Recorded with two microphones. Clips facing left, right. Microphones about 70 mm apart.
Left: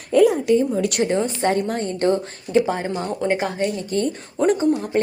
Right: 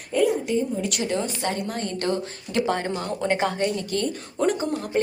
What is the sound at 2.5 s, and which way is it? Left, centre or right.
A woman's voice, centre.